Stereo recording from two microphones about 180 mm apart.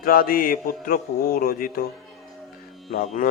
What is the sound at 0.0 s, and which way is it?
Mantra, 55° left (ahead or behind).